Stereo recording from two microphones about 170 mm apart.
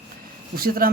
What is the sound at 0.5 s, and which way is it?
Speech, 60° right (ahead or behind).